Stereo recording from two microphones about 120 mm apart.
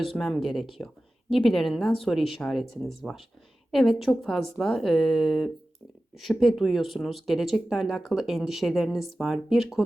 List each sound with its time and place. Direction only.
0.0 s speech: 5° left (ahead or behind)